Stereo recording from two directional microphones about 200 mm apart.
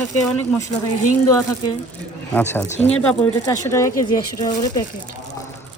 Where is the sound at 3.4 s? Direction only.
15° left (ahead or behind).